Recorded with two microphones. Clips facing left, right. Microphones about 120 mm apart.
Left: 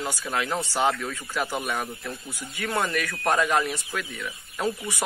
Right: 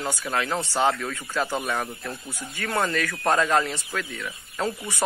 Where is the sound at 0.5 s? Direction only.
25° right (ahead or behind).